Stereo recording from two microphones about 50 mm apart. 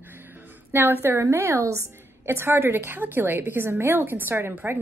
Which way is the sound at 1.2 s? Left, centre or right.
Right.